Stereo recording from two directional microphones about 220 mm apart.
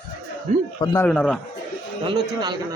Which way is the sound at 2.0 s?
20° right (ahead or behind).